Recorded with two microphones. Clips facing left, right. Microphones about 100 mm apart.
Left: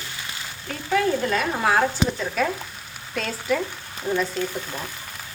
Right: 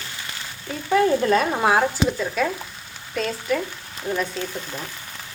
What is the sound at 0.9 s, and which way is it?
Speech, 35° right (ahead or behind).